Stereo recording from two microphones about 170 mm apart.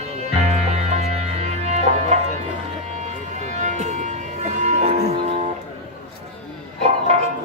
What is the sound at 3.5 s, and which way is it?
Music, 45° right (ahead or behind).